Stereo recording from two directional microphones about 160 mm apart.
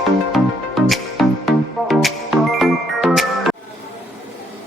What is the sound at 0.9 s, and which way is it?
Music, centre (ahead or behind).